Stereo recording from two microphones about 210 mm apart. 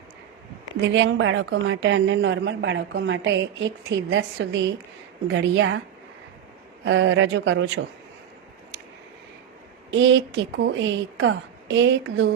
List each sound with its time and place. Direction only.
0.8 s a woman's voice: 60° right (ahead or behind)
6.8 s a woman's voice: 60° right (ahead or behind)
9.9 s a woman's voice: 60° right (ahead or behind)